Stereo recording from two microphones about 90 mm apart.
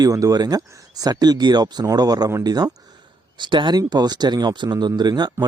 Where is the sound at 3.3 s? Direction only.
60° right (ahead or behind).